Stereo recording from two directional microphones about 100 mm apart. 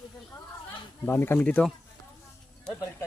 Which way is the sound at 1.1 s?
25° left (ahead or behind).